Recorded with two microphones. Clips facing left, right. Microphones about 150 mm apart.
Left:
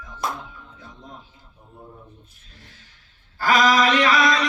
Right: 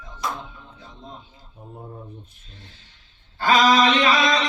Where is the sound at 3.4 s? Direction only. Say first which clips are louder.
Right 1 dB; 25° right (ahead or behind).